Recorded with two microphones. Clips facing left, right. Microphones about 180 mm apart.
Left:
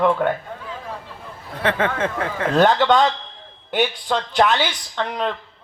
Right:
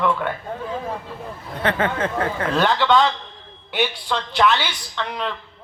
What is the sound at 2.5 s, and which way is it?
A woman's voice, 45° left (ahead or behind).